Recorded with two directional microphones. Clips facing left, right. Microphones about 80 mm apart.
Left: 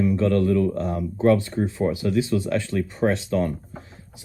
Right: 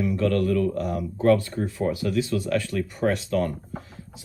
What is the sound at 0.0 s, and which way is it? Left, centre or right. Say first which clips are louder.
Speech: left 3 dB; left.